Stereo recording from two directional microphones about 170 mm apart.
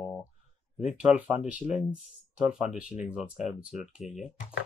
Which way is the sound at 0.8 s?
5° right (ahead or behind).